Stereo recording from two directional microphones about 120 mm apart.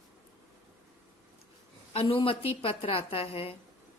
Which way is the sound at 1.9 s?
50° left (ahead or behind).